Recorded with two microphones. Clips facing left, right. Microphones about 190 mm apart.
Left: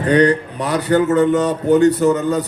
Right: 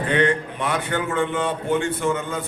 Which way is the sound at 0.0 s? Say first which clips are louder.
Left 7 dB; 40° left (ahead or behind).